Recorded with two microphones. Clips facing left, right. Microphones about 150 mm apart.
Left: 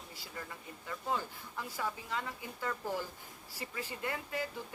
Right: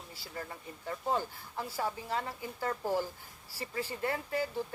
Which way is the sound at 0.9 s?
35° right (ahead or behind).